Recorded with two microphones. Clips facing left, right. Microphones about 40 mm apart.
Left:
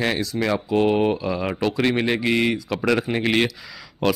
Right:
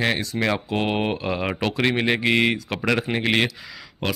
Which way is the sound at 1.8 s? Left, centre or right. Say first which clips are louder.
Right 2 dB; right.